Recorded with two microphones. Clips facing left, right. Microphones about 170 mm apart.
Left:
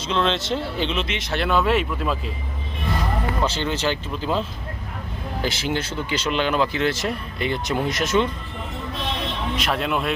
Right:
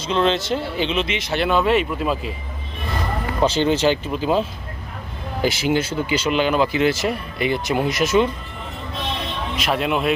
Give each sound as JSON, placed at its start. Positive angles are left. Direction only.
{"t": 0.1, "sound": "speech", "side_deg": -5}
{"t": 3.4, "sound": "speech", "side_deg": -15}
{"t": 9.6, "sound": "speech", "side_deg": -5}